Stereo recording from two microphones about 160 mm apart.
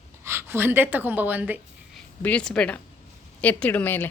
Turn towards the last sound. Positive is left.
turn(degrees=10)  # may be behind; listen again after turning